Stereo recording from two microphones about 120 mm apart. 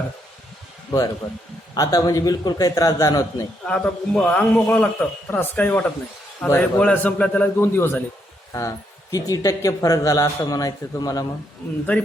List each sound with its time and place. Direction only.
0.9 s a man's voice: 30° left (ahead or behind)
3.6 s a man's voice: 5° left (ahead or behind)
9.1 s a man's voice: 30° left (ahead or behind)